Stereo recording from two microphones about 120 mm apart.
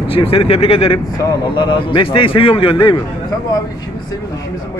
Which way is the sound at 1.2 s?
35° left (ahead or behind).